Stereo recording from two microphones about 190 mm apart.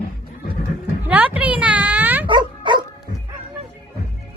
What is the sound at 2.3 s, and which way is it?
Dog, 25° right (ahead or behind).